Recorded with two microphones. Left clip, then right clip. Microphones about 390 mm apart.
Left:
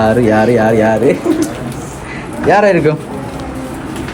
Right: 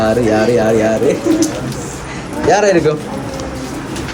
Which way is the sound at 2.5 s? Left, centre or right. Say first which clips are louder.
Left 2 dB; centre.